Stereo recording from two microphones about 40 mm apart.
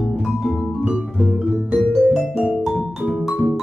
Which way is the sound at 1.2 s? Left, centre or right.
Right.